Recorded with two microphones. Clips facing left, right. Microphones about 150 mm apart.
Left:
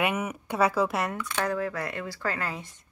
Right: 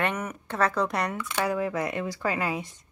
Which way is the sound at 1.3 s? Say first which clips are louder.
Right 3 dB; 10° right (ahead or behind).